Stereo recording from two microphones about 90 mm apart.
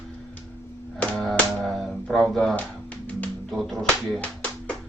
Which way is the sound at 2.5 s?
15° left (ahead or behind).